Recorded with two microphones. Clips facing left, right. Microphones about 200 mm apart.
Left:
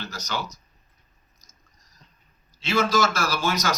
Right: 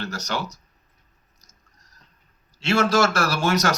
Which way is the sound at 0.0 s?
70° right (ahead or behind).